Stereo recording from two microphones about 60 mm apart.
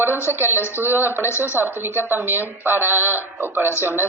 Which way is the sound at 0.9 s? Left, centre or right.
Left.